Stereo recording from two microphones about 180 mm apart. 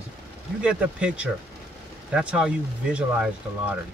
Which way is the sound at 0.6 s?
5° right (ahead or behind).